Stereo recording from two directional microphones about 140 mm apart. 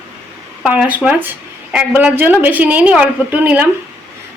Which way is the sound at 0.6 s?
10° right (ahead or behind).